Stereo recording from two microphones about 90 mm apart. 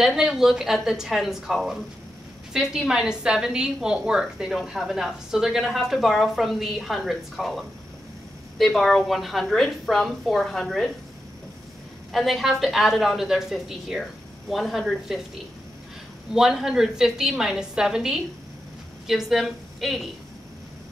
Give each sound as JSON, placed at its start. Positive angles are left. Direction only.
{"t": 0.0, "sound": "a woman's voice", "side_deg": -5}
{"t": 12.1, "sound": "a woman's voice", "side_deg": 0}